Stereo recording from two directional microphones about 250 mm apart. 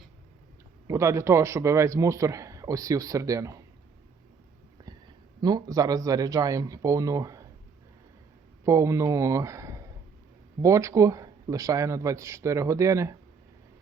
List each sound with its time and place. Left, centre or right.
0.9 s a man's voice: centre
4.9 s a sound: centre
5.4 s a man's voice: centre
8.6 s a man's voice: centre